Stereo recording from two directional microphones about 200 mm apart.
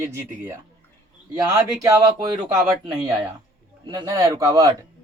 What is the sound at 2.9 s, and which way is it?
Speech, 15° right (ahead or behind).